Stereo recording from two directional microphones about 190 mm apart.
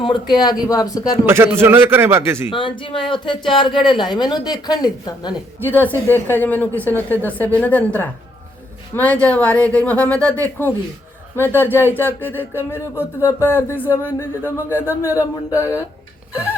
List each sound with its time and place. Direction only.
0.0 s speech: 25° left (ahead or behind)
1.2 s a man's voice: 10° right (ahead or behind)
2.5 s speech: 25° left (ahead or behind)
5.6 s speech: 10° left (ahead or behind)